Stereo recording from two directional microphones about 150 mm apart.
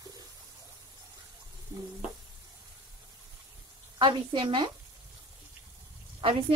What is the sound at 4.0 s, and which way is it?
Speech, 30° right (ahead or behind).